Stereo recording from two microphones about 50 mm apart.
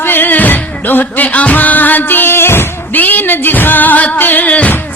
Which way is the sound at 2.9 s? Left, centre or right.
Left.